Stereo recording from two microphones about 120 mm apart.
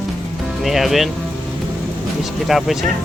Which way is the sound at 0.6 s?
Centre (ahead or behind).